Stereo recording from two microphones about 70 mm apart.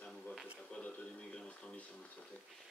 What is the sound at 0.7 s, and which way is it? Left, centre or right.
Speech, centre.